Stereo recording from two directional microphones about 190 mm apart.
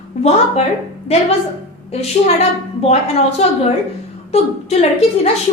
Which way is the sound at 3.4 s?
35° left (ahead or behind).